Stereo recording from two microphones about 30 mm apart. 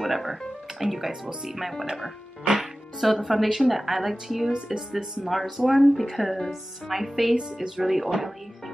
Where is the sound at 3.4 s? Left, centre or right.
Centre.